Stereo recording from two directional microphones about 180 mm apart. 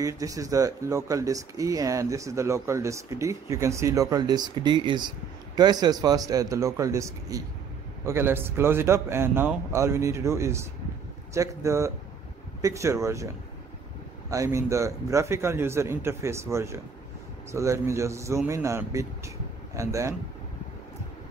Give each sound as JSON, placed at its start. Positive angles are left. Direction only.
{"t": 0.0, "sound": "a man's voice", "side_deg": -20}
{"t": 14.3, "sound": "a man's voice", "side_deg": -15}